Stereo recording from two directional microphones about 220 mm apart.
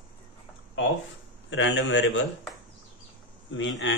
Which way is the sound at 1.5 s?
60° left (ahead or behind).